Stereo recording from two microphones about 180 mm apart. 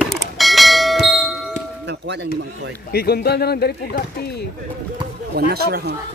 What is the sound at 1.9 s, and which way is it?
Speech, 75° right (ahead or behind).